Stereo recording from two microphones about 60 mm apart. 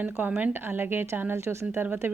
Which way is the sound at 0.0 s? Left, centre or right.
Right.